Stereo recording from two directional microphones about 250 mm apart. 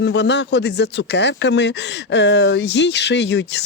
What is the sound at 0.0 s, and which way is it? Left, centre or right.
Speech, left.